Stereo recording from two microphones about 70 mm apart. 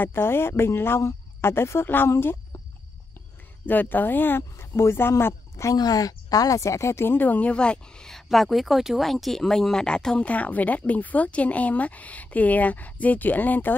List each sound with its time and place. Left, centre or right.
0.0 s speech: left
3.6 s speech: left
5.8 s speech: left
7.2 s speech: left
8.1 s speech: centre; by 13.7 s left